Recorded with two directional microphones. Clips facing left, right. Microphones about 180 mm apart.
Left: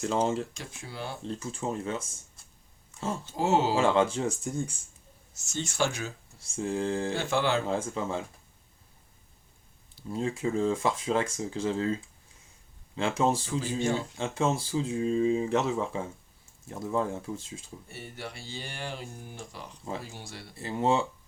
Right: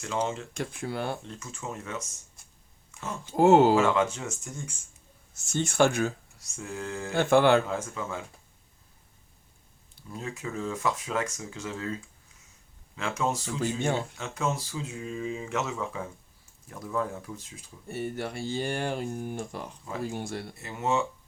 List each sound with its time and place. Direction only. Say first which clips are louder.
0.0 s speech: left 3 dB; 35° left (ahead or behind)
0.5 s speech: right 9 dB; 60° right (ahead or behind)
1.2 s speech: left 6 dB; 30° left (ahead or behind)
3.3 s speech: right 8 dB; 55° right (ahead or behind)
3.8 s speech: even; 30° left (ahead or behind)
5.3 s speech: right 5 dB; 55° right (ahead or behind)
6.4 s speech: left 7 dB; 30° left (ahead or behind)
7.2 s speech: right 10 dB; 55° right (ahead or behind)
7.7 s speech: left 3 dB; 30° left (ahead or behind)
10.1 s speech: left 7 dB; 30° left (ahead or behind)
13.0 s speech: left 3 dB; 30° left (ahead or behind)
17.8 s speech: right 11 dB; 50° right (ahead or behind)
20.6 s speech: left 3 dB; 30° left (ahead or behind)